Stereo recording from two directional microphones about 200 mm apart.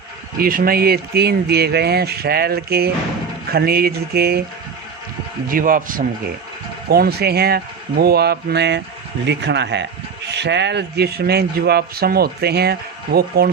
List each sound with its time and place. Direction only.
0.3 s speech: 45° right (ahead or behind)
5.5 s speech: 45° right (ahead or behind)